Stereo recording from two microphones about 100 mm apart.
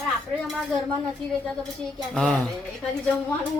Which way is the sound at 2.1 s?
10° left (ahead or behind).